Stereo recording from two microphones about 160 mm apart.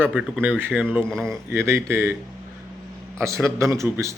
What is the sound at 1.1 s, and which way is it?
Speech, 5° left (ahead or behind).